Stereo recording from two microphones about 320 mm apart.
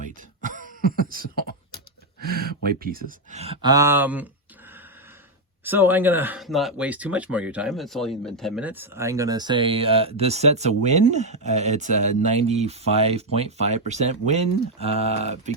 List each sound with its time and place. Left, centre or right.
0.4 s cough: right
2.3 s speech: right; by 4.3 s centre
5.6 s speech: centre